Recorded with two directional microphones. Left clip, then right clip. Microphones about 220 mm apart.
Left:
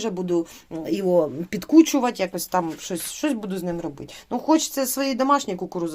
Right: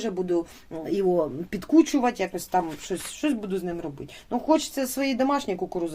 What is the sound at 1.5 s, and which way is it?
Speech, 40° left (ahead or behind).